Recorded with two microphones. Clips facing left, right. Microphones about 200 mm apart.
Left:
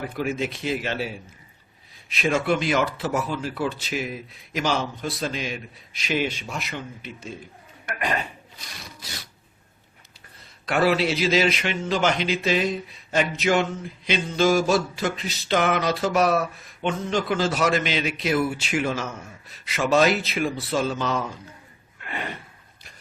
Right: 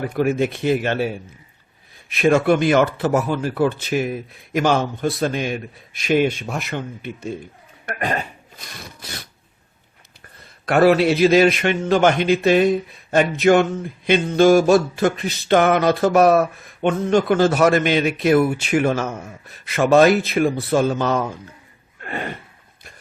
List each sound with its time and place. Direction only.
0.0 s a man's voice: 55° right (ahead or behind)
7.9 s speech: 40° right (ahead or behind)
8.5 s wood: 55° right (ahead or behind)
10.7 s a man's voice: 55° right (ahead or behind)